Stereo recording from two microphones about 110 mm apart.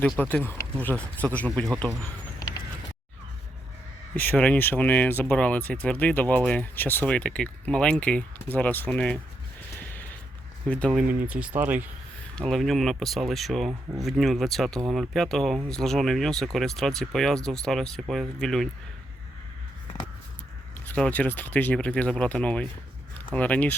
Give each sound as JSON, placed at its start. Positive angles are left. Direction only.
{"t": 0.0, "sound": "speech", "side_deg": 15}
{"t": 2.4, "sound": "a sound", "side_deg": 35}
{"t": 4.1, "sound": "speech", "side_deg": 15}
{"t": 9.9, "sound": "creak", "side_deg": 15}
{"t": 10.7, "sound": "speech", "side_deg": 10}
{"t": 10.9, "sound": "speech", "side_deg": -15}
{"t": 12.4, "sound": "speech", "side_deg": 5}
{"t": 20.7, "sound": "speech", "side_deg": 15}